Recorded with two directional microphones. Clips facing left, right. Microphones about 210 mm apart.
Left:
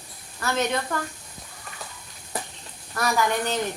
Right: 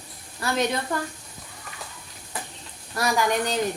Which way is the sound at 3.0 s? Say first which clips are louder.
Right 1 dB; 10° right (ahead or behind).